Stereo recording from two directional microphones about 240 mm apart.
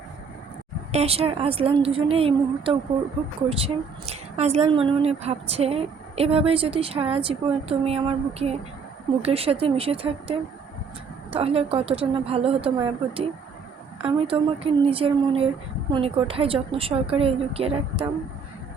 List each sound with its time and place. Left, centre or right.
0.9 s a woman's voice: right